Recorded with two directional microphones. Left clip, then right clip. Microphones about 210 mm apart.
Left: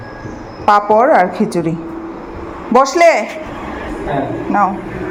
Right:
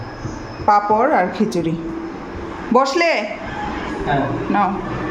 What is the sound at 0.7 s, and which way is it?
Speech, 15° left (ahead or behind).